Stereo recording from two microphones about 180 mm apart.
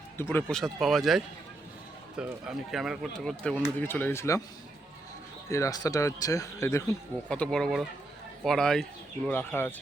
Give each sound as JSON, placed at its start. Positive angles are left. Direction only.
{"t": 0.2, "sound": "speech", "side_deg": 10}
{"t": 5.5, "sound": "speech", "side_deg": 15}
{"t": 7.3, "sound": "speech", "side_deg": 5}